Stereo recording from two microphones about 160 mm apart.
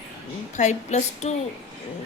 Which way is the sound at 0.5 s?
45° left (ahead or behind).